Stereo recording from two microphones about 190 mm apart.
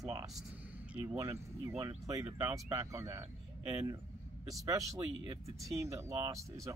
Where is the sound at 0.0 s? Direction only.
20° right (ahead or behind).